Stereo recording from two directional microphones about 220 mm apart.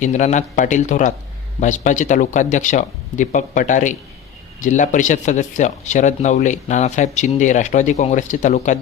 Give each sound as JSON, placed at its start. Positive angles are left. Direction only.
{"t": 0.0, "sound": "speech", "side_deg": 30}